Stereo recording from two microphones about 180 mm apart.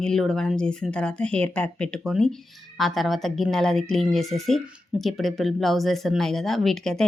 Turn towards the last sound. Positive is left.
turn(degrees=0)  # may be behind; listen again after turning